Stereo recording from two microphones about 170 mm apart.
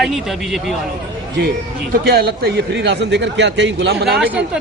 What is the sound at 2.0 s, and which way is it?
A man's voice, 70° right (ahead or behind).